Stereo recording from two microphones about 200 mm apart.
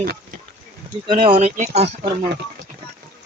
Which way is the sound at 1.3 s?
30° right (ahead or behind).